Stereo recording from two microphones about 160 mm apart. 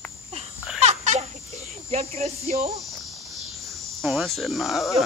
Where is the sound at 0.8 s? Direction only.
45° right (ahead or behind).